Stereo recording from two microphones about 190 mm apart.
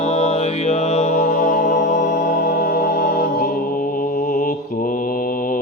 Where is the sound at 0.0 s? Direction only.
35° left (ahead or behind).